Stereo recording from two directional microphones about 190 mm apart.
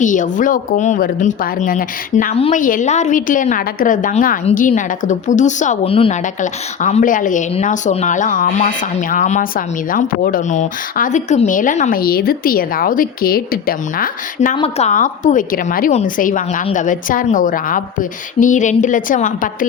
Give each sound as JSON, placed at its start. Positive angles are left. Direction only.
{"t": 0.0, "sound": "a woman's voice", "side_deg": 40}
{"t": 14.5, "sound": "a woman's voice", "side_deg": 30}